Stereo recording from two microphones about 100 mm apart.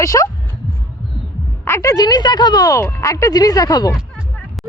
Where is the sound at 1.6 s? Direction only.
30° left (ahead or behind).